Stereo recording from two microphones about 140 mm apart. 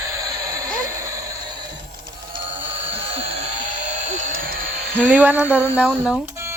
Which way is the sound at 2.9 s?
40° right (ahead or behind).